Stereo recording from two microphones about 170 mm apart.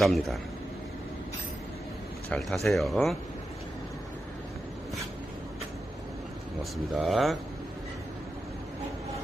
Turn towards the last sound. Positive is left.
turn(degrees=0)  # may be behind; listen again after turning